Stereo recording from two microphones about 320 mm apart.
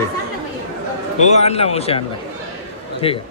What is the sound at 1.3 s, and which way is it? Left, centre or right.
Speech, centre.